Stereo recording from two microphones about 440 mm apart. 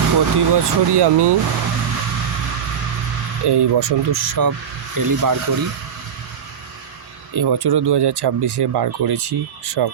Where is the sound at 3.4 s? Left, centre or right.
Right.